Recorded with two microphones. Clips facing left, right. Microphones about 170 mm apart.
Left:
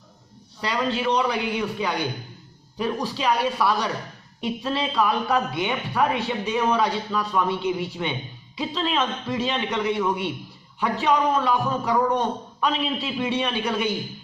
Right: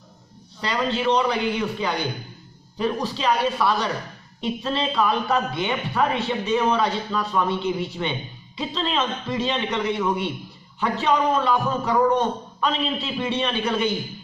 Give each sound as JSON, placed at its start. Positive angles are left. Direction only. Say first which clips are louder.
{"t": 0.6, "sound": "speech", "louder": "right 1 dB", "side_deg": 5}